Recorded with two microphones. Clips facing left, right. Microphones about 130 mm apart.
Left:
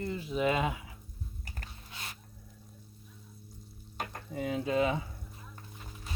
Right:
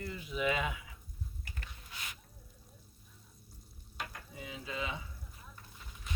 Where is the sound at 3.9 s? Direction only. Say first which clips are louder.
Left 7 dB; 50° left (ahead or behind).